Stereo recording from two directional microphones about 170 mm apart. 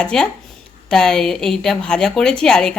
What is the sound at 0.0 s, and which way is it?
A woman's voice, 5° left (ahead or behind).